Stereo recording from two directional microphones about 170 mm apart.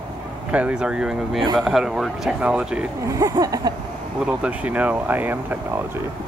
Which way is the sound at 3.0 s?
20° right (ahead or behind).